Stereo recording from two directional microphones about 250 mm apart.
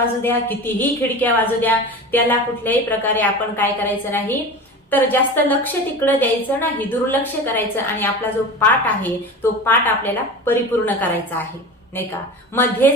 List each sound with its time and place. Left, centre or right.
0.0 s a woman's voice: centre
12.6 s a woman's voice: centre